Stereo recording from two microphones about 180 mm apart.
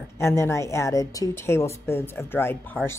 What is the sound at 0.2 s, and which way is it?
Speech, 15° left (ahead or behind).